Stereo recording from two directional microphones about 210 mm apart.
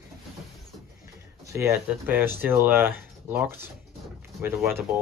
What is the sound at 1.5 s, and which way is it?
Speech, 15° right (ahead or behind).